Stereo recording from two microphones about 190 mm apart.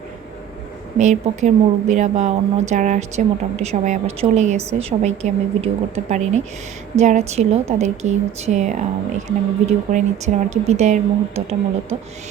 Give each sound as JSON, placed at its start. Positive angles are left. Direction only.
{"t": 0.9, "sound": "a woman's voice", "side_deg": -40}